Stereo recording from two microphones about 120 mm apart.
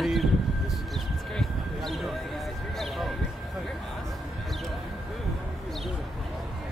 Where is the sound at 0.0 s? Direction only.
Centre (ahead or behind).